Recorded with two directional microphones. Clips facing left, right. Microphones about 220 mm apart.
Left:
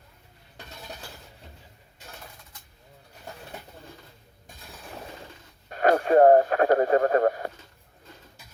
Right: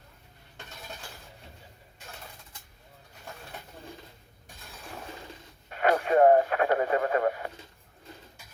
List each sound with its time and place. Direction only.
5.6 s speech: 40° left (ahead or behind)